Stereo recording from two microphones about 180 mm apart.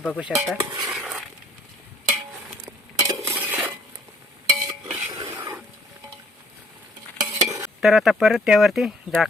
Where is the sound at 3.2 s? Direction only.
10° right (ahead or behind).